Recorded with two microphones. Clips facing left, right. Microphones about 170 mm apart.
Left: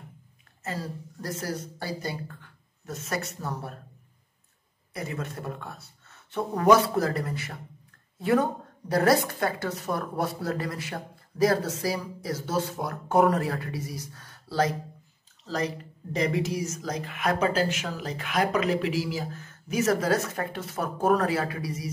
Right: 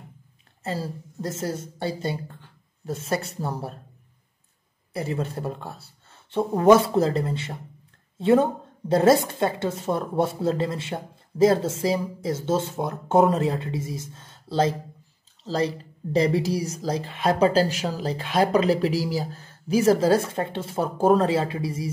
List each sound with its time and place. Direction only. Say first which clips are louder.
0.7 s a woman's voice: right 4 dB; 25° right (ahead or behind)
4.9 s a woman's voice: right 6 dB; 30° right (ahead or behind)